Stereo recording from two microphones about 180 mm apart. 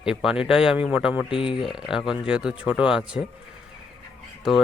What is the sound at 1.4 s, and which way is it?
Speech, 30° left (ahead or behind).